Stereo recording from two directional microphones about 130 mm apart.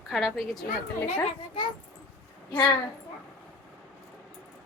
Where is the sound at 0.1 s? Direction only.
5° right (ahead or behind).